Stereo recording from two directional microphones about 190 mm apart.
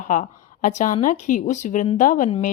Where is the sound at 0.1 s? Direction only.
40° left (ahead or behind).